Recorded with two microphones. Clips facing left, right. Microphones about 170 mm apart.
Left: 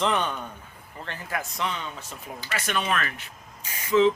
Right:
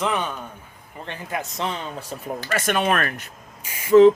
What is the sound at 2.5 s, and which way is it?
Speech, 50° right (ahead or behind).